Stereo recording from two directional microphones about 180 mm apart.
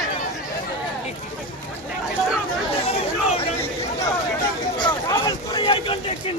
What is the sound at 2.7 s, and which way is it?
Chatter, 35° left (ahead or behind).